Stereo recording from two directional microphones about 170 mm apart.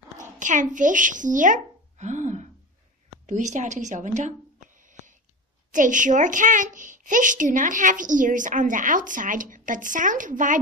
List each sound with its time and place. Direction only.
0.2 s a woman's voice: 50° right (ahead or behind)
4.7 s a sound: 50° right (ahead or behind)
5.7 s a woman's voice: 50° right (ahead or behind)